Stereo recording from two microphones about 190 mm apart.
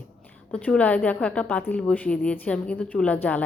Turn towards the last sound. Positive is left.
turn(degrees=10)  # may be behind; listen again after turning